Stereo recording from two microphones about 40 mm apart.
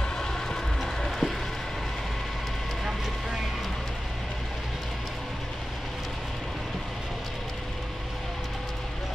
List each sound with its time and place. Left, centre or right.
0.7 s music: centre